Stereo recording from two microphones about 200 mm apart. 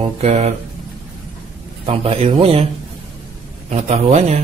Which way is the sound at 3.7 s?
35° right (ahead or behind).